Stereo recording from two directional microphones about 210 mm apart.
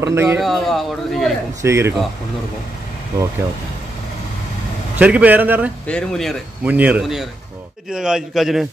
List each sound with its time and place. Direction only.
0.0 s a man's voice: 10° right (ahead or behind)
0.4 s speech: centre (ahead or behind)
1.6 s a man's voice: 15° right (ahead or behind)
4.9 s a man's voice: 10° right (ahead or behind)
5.9 s speech: 5° left (ahead or behind)